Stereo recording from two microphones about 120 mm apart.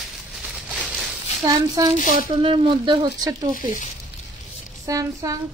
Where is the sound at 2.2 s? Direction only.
50° right (ahead or behind).